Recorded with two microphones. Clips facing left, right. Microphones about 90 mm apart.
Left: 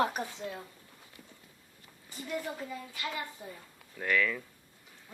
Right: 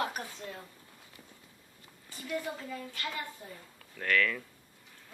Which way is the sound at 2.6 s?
15° left (ahead or behind).